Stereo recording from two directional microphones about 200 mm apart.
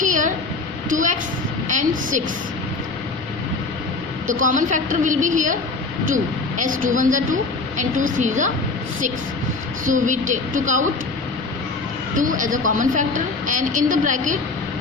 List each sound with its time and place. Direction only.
0.0 s a sound: 40° right (ahead or behind)
0.9 s a woman's voice: 40° right (ahead or behind)
4.3 s a woman's voice: 40° right (ahead or behind)
9.8 s a woman's voice: 40° right (ahead or behind)
12.1 s a woman's voice: 40° right (ahead or behind)